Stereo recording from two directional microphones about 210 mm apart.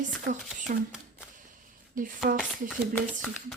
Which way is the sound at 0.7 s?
40° right (ahead or behind).